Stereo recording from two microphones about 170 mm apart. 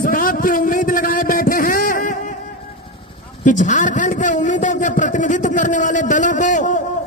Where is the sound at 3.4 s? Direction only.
45° left (ahead or behind).